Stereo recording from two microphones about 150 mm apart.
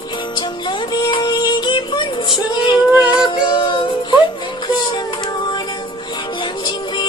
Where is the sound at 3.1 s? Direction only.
35° left (ahead or behind).